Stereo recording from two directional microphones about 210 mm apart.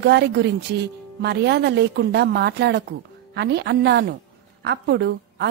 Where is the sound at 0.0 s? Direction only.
55° right (ahead or behind).